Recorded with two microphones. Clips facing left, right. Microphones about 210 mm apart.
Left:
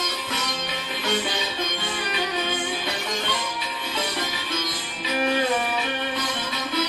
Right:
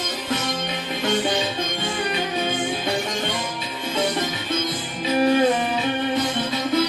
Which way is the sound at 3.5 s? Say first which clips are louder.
Right 4 dB; 25° right (ahead or behind).